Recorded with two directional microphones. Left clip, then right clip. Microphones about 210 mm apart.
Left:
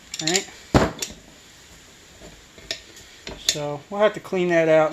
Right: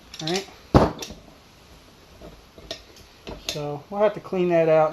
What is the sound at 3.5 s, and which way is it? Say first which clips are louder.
Speech: left 2 dB; 40° left (ahead or behind).